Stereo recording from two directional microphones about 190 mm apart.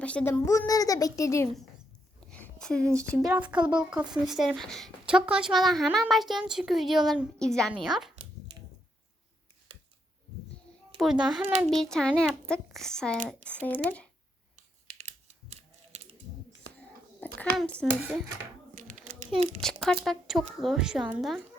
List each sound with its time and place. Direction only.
0.0 s a woman's voice: 5° left (ahead or behind)
2.2 s a sound: 5° left (ahead or behind)
3.2 s a woman's voice: 5° right (ahead or behind)
10.9 s a woman's voice: centre (ahead or behind)
14.5 s typing: 35° right (ahead or behind)
17.6 s a woman's voice: 5° left (ahead or behind)
18.7 s a sound: 45° right (ahead or behind)
19.3 s a child's voice: 30° right (ahead or behind)
20.1 s a woman's voice: centre (ahead or behind)